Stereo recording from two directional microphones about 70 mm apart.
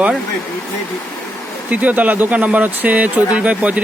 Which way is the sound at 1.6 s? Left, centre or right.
Right.